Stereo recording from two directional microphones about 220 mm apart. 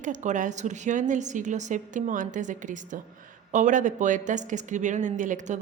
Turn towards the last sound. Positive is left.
turn(degrees=-35)  # may be behind; listen again after turning